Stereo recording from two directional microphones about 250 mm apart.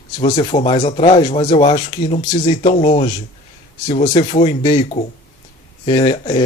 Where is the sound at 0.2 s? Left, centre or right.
Left.